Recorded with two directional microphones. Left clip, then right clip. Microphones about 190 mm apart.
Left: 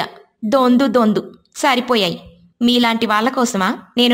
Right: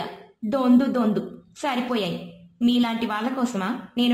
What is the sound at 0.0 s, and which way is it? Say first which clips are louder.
A woman's voice: left 8 dB; 35° left (ahead or behind).